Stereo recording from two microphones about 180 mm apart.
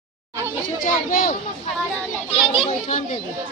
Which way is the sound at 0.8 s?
50° left (ahead or behind).